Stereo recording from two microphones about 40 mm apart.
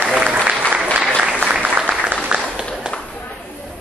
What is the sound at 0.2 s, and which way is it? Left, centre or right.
Applause, right.